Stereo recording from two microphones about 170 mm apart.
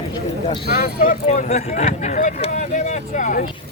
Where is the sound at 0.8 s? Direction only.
55° left (ahead or behind).